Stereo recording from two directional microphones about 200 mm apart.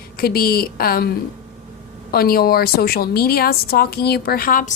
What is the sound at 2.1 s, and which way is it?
A woman's voice, 50° left (ahead or behind).